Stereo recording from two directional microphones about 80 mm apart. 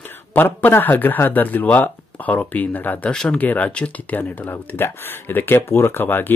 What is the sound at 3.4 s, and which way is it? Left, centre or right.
Speech, left.